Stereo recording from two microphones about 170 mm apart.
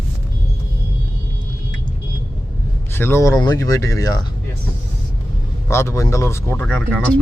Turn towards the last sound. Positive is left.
turn(degrees=10)  # may be behind; listen again after turning